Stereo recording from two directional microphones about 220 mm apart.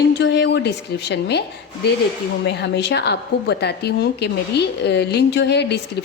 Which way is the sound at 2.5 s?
50° left (ahead or behind).